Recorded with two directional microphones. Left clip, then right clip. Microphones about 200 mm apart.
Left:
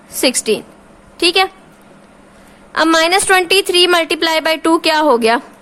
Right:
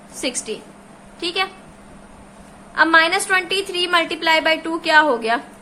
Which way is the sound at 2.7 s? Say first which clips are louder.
Left 3 dB; 55° left (ahead or behind).